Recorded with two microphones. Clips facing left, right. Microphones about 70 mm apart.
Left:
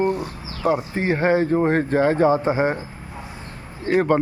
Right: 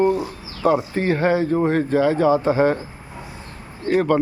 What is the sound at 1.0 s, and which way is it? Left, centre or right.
Speech, left.